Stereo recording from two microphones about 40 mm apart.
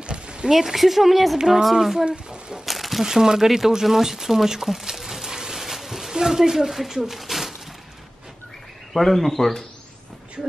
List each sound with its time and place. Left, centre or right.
0.0 s a sound: right
0.5 s a woman's voice: centre
2.0 s speech: right
2.6 s speech: centre
8.9 s a woman's voice: centre